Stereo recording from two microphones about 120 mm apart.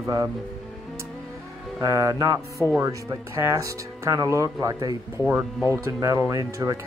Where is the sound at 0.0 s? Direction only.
25° right (ahead or behind).